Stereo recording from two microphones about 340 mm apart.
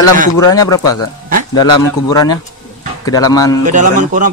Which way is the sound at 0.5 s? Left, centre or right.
Centre.